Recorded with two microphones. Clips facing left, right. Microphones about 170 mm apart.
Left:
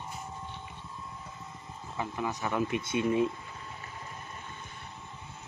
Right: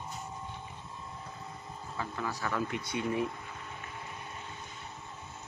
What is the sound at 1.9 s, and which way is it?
Speech, 20° left (ahead or behind).